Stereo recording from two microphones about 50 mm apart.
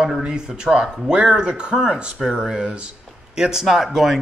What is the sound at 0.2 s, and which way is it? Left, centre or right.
A man's voice, centre.